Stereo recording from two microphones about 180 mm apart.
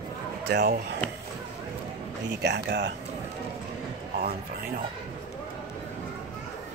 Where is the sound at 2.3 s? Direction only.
70° right (ahead or behind).